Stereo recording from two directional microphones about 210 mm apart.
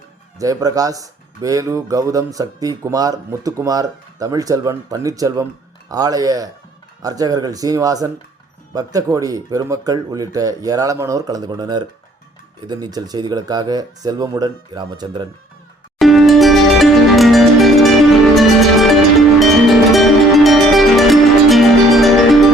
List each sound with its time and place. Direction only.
0.3 s speech: 15° right (ahead or behind)
16.0 s music: centre (ahead or behind)